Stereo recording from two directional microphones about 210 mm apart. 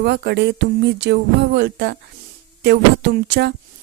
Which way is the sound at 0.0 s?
50° right (ahead or behind).